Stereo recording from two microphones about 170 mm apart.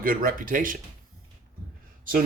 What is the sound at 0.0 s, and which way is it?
Speech, 55° right (ahead or behind).